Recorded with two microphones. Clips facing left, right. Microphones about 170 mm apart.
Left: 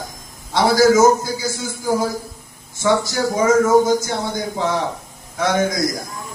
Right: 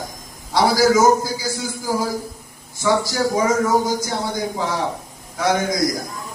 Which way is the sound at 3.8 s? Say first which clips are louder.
Left 3 dB; 25° left (ahead or behind).